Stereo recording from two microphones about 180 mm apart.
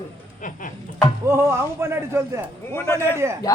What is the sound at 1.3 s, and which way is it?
A man's voice, 15° right (ahead or behind).